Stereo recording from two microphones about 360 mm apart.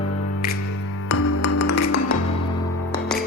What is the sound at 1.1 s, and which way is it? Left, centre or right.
Music, left.